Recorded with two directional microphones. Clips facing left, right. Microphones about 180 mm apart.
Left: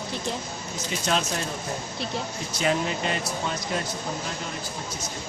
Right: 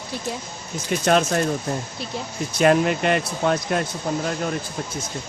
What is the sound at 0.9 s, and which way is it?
Speech, 55° right (ahead or behind).